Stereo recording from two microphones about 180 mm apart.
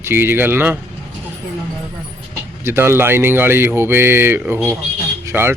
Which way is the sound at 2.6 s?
15° right (ahead or behind).